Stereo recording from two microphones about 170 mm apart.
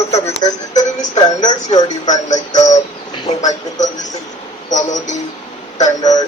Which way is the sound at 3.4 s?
45° left (ahead or behind).